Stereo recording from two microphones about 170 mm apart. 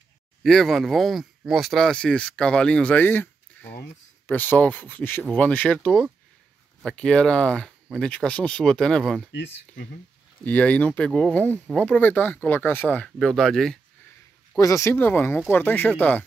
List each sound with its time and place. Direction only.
0.4 s speech: centre (ahead or behind)
3.6 s a sound: 10° left (ahead or behind)
4.3 s speech: 10° left (ahead or behind)
5.9 s speech: 5° right (ahead or behind)
6.8 s speech: 5° left (ahead or behind)
9.3 s speech: 90° left
10.4 s speech: 10° left (ahead or behind)
14.6 s speech: 20° left (ahead or behind)